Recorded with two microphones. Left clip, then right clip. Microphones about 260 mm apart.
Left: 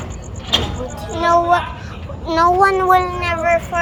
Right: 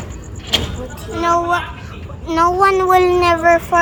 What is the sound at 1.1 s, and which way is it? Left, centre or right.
Child singing, centre.